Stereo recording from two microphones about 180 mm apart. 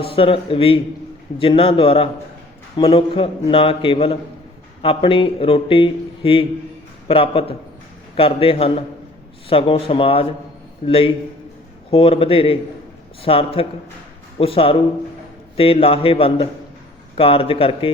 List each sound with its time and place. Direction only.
0.1 s a man's voice: 30° left (ahead or behind)